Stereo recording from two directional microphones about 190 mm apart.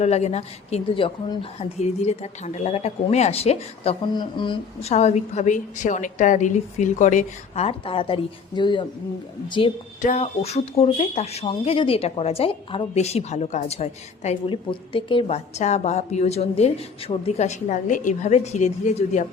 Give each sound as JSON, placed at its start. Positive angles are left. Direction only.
{"t": 0.0, "sound": "a woman's voice", "side_deg": 35}
{"t": 10.0, "sound": "speech", "side_deg": 40}